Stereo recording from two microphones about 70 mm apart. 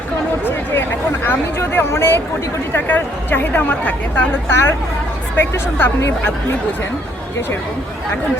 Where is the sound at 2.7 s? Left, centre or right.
Left.